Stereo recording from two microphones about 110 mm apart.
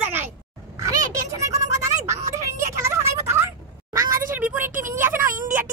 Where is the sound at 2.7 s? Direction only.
25° right (ahead or behind).